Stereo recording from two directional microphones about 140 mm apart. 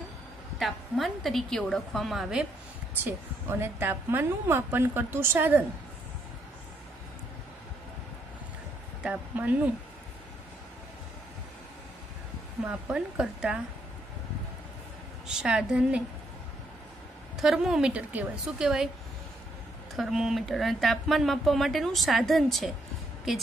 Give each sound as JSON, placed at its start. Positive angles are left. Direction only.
{"t": 0.6, "sound": "speech", "side_deg": 0}
{"t": 3.0, "sound": "a woman's voice", "side_deg": -15}
{"t": 9.0, "sound": "speech", "side_deg": -10}
{"t": 12.6, "sound": "a woman's voice", "side_deg": -10}
{"t": 15.2, "sound": "speech", "side_deg": -5}
{"t": 17.4, "sound": "speech", "side_deg": 0}
{"t": 20.0, "sound": "speech", "side_deg": 0}